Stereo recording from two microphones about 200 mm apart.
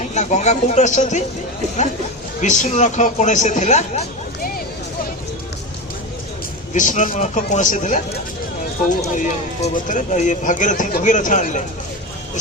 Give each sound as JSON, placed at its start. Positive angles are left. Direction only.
{"t": 0.1, "sound": "speech", "side_deg": 35}
{"t": 2.4, "sound": "speech", "side_deg": 35}
{"t": 6.7, "sound": "speech", "side_deg": 40}